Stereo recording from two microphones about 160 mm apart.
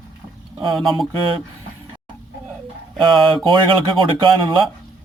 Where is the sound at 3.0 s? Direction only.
30° right (ahead or behind).